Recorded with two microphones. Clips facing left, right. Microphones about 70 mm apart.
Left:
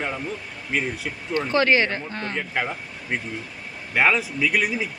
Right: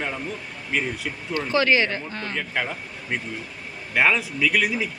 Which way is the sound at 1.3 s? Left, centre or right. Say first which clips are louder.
Left 1 dB; left.